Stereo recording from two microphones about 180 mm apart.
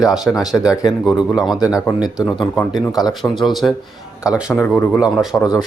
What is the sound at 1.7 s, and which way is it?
Speech, 20° left (ahead or behind).